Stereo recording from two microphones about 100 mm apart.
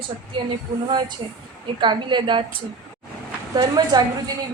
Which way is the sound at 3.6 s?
40° right (ahead or behind).